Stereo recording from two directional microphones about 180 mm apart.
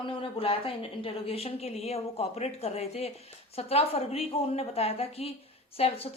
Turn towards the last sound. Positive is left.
turn(degrees=35)  # may be behind; listen again after turning